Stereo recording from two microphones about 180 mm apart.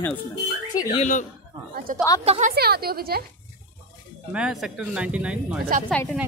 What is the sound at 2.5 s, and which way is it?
Speech, 60° right (ahead or behind).